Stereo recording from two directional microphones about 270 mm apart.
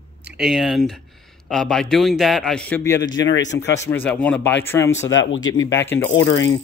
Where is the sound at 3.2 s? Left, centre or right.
Left.